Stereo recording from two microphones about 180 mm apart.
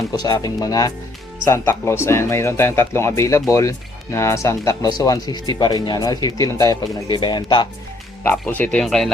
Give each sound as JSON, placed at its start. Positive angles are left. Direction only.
{"t": 0.1, "sound": "speech", "side_deg": 20}
{"t": 8.2, "sound": "speech", "side_deg": 10}